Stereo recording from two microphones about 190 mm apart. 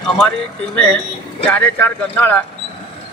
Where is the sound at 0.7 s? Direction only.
5° left (ahead or behind).